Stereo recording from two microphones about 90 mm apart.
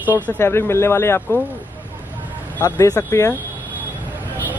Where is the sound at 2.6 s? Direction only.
35° left (ahead or behind).